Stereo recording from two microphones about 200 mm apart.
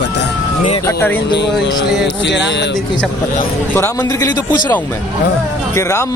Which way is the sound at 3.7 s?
15° left (ahead or behind).